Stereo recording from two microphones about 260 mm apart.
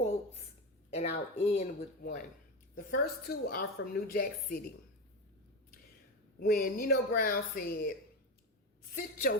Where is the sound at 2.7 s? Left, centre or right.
Left.